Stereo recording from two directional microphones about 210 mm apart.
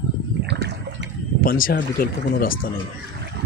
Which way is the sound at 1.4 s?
45° left (ahead or behind).